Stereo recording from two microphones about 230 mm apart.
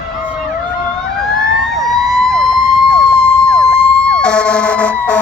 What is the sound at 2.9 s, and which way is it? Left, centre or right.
Emergency vehicle, centre.